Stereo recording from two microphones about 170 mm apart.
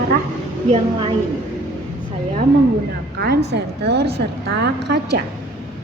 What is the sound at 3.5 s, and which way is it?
A woman's voice, 80° right.